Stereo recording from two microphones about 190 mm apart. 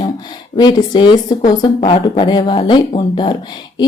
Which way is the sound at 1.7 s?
35° left (ahead or behind).